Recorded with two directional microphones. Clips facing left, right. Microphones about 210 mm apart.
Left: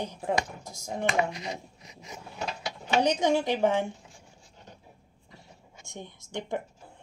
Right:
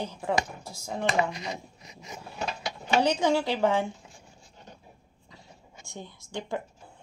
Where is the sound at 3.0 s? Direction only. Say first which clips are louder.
Even; 15° left (ahead or behind).